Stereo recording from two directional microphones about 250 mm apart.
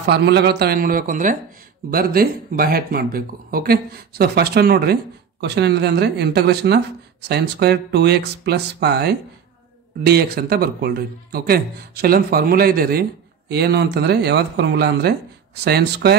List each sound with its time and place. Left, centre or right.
0.1 s speech: right